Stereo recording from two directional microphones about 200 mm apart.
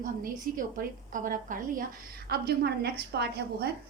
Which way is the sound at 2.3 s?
55° right (ahead or behind).